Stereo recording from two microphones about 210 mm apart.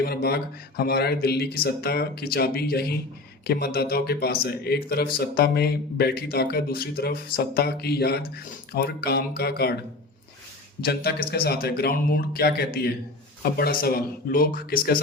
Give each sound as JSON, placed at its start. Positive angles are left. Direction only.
{"t": 0.0, "sound": "speech", "side_deg": 45}
{"t": 10.8, "sound": "speech", "side_deg": 50}